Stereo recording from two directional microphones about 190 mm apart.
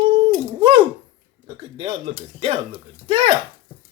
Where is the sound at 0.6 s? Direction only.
25° right (ahead or behind).